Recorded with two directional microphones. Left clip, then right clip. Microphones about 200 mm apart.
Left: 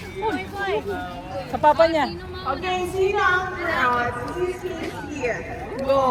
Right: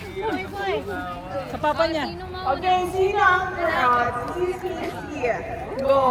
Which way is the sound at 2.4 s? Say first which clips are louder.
Right 4 dB; 55° right (ahead or behind).